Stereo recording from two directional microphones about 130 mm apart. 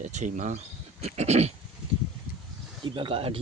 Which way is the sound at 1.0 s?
55° right (ahead or behind).